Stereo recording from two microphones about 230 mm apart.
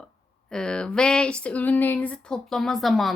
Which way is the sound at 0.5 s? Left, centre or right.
Centre.